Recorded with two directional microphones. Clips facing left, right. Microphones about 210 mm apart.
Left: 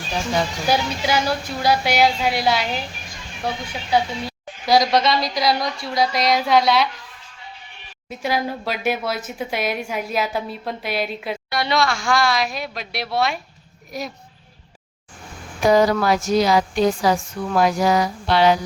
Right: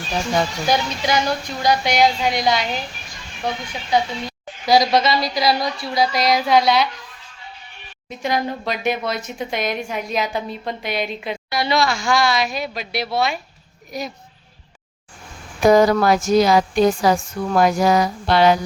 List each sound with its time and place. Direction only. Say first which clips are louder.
0.7 s a woman's voice: even; 5° left (ahead or behind)
8.1 s speech: right 1 dB; 5° left (ahead or behind)
15.6 s a woman's voice: right 3 dB; 45° right (ahead or behind)